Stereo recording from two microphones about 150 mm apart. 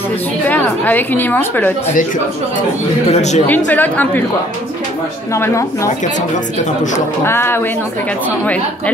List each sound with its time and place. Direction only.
0.5 s a woman's voice: 10° left (ahead or behind)
3.1 s speech: 50° left (ahead or behind)
3.4 s a woman's voice: 10° left (ahead or behind)
5.3 s speech: 20° left (ahead or behind)
7.2 s a woman's voice: 15° left (ahead or behind)